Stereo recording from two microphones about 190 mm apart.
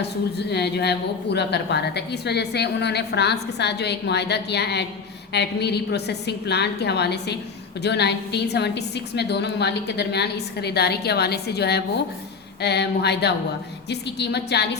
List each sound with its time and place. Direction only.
0.3 s a woman's voice: 60° left (ahead or behind)